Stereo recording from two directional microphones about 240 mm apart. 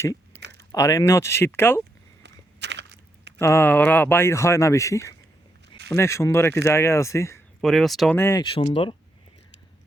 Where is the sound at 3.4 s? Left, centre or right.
Centre.